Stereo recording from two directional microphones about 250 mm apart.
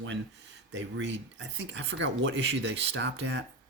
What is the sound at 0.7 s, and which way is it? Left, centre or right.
Speech, right.